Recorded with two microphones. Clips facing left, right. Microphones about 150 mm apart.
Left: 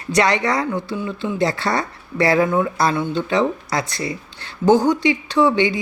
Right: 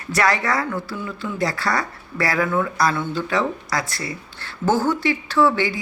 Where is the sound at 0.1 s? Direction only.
20° left (ahead or behind).